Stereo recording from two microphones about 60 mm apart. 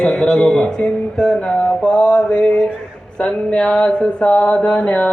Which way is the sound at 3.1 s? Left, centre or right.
Centre.